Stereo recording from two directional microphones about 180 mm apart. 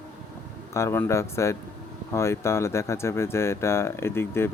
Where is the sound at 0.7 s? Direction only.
15° left (ahead or behind).